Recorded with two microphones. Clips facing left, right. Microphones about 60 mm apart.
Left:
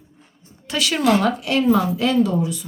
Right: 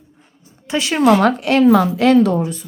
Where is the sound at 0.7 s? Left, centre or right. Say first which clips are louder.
Right 5 dB; right.